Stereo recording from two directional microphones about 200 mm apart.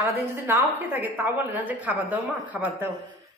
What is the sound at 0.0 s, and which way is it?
A man's voice, 10° right (ahead or behind).